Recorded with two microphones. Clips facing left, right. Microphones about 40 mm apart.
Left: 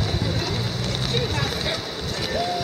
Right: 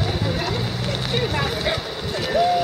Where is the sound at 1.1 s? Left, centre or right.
Centre.